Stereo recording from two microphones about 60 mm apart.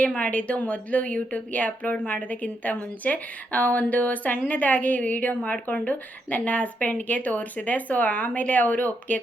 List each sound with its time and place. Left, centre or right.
0.0 s speech: left